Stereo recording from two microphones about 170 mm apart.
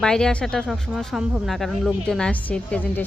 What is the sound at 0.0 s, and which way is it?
A woman's voice, 5° left (ahead or behind).